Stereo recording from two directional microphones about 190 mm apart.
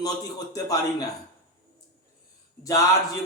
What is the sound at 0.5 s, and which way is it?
Speech, 20° left (ahead or behind).